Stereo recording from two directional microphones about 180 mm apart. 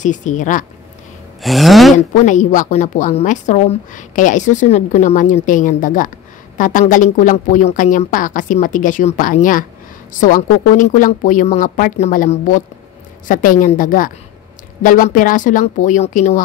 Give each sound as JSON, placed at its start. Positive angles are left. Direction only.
{"t": 0.0, "sound": "a woman's voice", "side_deg": 45}
{"t": 1.4, "sound": "speech", "side_deg": 0}
{"t": 2.1, "sound": "a woman's voice", "side_deg": 45}